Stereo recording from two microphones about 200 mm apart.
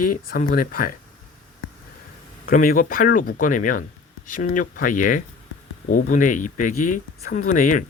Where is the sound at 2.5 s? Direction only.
40° left (ahead or behind).